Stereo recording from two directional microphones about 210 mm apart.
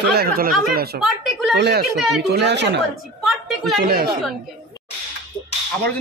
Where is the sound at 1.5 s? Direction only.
50° right (ahead or behind).